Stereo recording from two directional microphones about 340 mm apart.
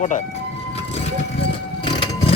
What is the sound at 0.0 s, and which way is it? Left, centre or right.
Speech, left.